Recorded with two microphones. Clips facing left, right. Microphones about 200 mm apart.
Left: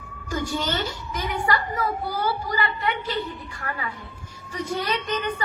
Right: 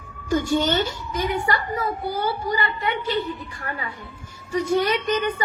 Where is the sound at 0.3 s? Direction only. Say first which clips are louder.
Right 6 dB; 25° right (ahead or behind).